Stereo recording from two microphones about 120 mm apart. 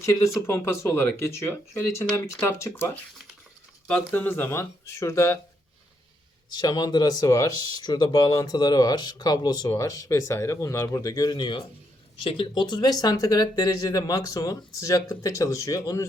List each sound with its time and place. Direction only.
0.0 s speech: 25° left (ahead or behind)
6.5 s speech: 35° left (ahead or behind)